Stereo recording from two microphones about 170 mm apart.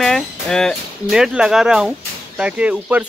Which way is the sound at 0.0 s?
5° left (ahead or behind).